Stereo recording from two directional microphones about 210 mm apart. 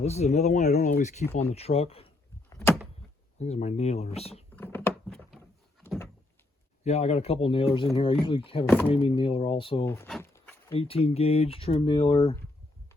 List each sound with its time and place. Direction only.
0.0 s speech: 30° left (ahead or behind)
3.3 s speech: 30° left (ahead or behind)
4.5 s a sound: 10° left (ahead or behind)
6.8 s speech: 30° left (ahead or behind)
9.8 s speech: 10° left (ahead or behind)
10.1 s a sound: 10° left (ahead or behind)
10.7 s speech: 25° left (ahead or behind)